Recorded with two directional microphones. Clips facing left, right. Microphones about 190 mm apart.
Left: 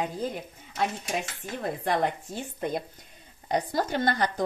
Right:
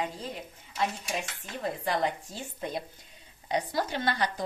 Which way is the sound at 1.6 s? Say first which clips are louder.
Left 2 dB; 55° left (ahead or behind).